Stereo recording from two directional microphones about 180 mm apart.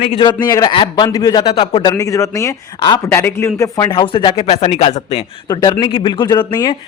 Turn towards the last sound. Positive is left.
turn(degrees=20)  # may be behind; listen again after turning